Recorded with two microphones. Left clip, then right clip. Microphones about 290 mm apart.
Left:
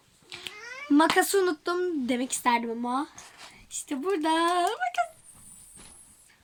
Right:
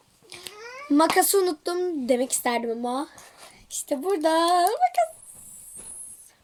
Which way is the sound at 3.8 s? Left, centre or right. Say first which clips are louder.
Right 4 dB; centre.